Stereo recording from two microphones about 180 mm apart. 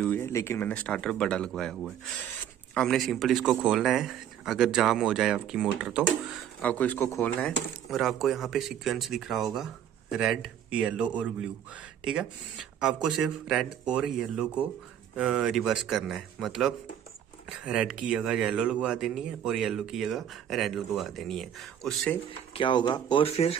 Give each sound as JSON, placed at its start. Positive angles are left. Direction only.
{"t": 0.0, "sound": "speech", "side_deg": 10}
{"t": 6.6, "sound": "speech", "side_deg": 10}
{"t": 22.5, "sound": "speech", "side_deg": 25}